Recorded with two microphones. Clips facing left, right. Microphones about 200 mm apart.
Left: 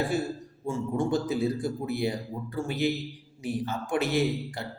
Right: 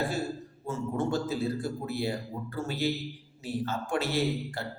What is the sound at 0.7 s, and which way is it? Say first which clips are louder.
Speech: left 3 dB; 15° left (ahead or behind).